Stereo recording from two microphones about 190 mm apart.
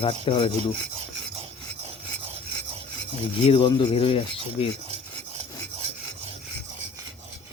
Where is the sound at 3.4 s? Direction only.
25° left (ahead or behind).